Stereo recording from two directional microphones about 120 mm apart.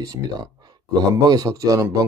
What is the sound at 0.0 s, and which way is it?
Speech, 35° right (ahead or behind).